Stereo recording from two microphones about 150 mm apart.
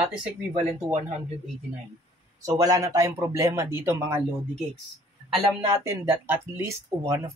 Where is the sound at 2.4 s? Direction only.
25° right (ahead or behind).